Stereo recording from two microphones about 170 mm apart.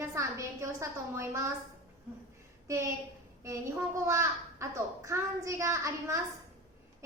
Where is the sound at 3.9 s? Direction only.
15° right (ahead or behind).